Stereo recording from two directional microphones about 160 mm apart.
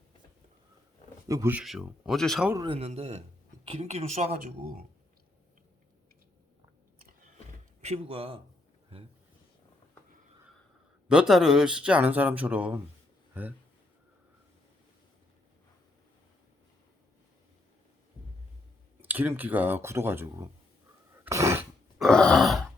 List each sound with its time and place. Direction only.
1.3 s speech: 20° right (ahead or behind)
1.5 s speech: 5° right (ahead or behind)
2.6 s speech: 40° right (ahead or behind)
7.8 s speech: 40° right (ahead or behind)
11.1 s speech: 5° right (ahead or behind)
19.0 s speech: 10° right (ahead or behind)
21.2 s a sound: 20° right (ahead or behind)
21.9 s grunt: centre (ahead or behind)